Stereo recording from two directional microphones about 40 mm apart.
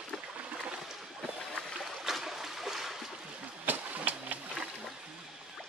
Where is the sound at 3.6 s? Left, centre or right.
Right.